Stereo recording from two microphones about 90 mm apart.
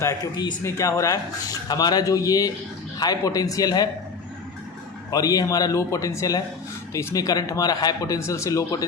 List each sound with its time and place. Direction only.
0.6 s speech: 35° left (ahead or behind)
1.6 s speech: 50° left (ahead or behind)
5.1 s speech: 45° left (ahead or behind)